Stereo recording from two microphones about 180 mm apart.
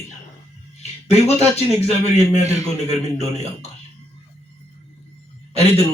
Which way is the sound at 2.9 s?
40° left (ahead or behind).